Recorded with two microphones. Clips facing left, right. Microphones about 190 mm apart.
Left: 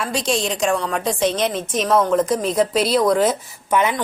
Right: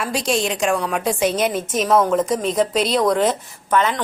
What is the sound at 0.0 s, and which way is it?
A woman's voice, 5° right (ahead or behind).